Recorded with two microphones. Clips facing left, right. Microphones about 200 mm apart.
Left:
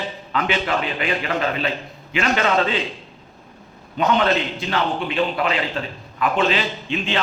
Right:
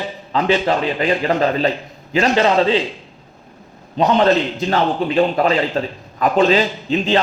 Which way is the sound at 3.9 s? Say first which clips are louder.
Right 5 dB; 35° right (ahead or behind).